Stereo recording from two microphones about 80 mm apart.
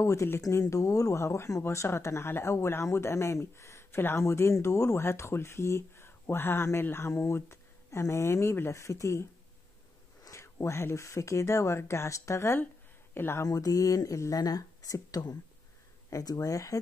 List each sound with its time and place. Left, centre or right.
0.0 s speech: left
10.3 s speech: left
13.4 s speech: left